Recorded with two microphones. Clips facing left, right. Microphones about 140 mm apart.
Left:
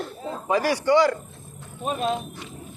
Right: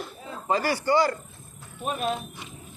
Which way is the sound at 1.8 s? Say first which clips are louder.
Left 3 dB; 30° left (ahead or behind).